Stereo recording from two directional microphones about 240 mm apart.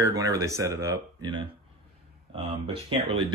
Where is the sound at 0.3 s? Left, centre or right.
Centre.